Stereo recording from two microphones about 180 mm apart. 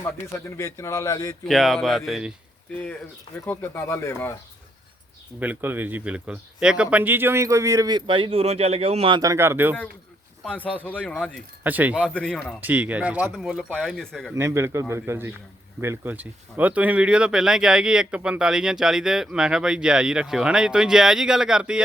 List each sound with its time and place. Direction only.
0.0 s a man's voice: 15° left (ahead or behind)
1.5 s speech: centre (ahead or behind)
3.4 s a man's voice: 10° left (ahead or behind)
5.4 s speech: 10° right (ahead or behind)
10.4 s speech: 5° left (ahead or behind)
11.6 s speech: 10° right (ahead or behind)
12.0 s speech: 5° left (ahead or behind)
12.5 s speech: 10° right (ahead or behind)
14.3 s speech: 15° right (ahead or behind)